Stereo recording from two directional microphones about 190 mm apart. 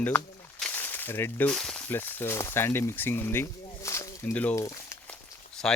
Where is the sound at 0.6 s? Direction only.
10° left (ahead or behind).